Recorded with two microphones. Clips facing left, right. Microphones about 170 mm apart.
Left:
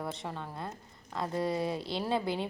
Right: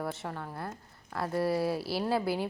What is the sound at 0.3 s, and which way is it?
Speech, 20° left (ahead or behind).